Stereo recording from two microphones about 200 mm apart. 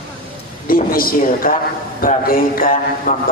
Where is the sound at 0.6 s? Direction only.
45° left (ahead or behind).